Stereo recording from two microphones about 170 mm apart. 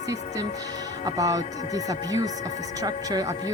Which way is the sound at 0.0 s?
20° right (ahead or behind).